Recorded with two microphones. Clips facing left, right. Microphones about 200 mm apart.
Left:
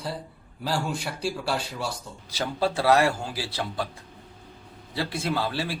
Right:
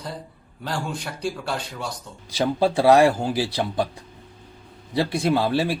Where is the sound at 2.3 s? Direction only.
15° right (ahead or behind).